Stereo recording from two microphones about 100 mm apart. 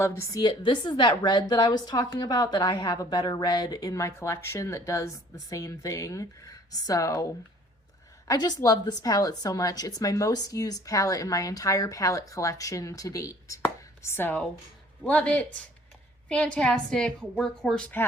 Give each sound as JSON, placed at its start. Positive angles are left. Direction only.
{"t": 0.0, "sound": "speech", "side_deg": 25}
{"t": 0.4, "sound": "a woman's voice", "side_deg": 50}
{"t": 8.3, "sound": "a woman's voice", "side_deg": 45}
{"t": 14.0, "sound": "a woman's voice", "side_deg": 25}